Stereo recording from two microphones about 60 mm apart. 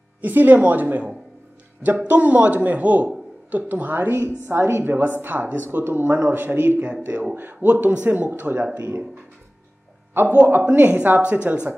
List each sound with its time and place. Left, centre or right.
0.2 s speech: right
10.3 s speech: right